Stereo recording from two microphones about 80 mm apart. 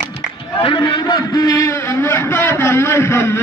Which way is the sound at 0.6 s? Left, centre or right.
Left.